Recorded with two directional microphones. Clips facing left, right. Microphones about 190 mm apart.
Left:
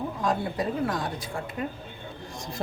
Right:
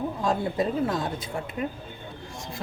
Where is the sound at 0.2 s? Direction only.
25° right (ahead or behind).